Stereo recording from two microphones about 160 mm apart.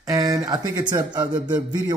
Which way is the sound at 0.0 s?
20° right (ahead or behind).